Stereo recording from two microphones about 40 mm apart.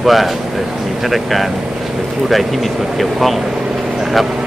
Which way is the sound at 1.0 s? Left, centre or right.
Centre.